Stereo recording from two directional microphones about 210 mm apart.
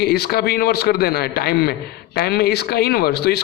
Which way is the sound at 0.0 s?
50° left (ahead or behind).